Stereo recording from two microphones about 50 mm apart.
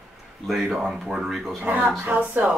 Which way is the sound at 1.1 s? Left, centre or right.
Centre.